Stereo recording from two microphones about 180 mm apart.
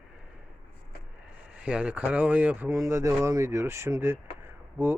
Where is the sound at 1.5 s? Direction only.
5° right (ahead or behind).